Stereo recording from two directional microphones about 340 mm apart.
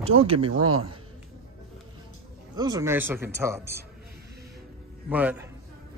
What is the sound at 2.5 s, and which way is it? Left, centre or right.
Speech, centre.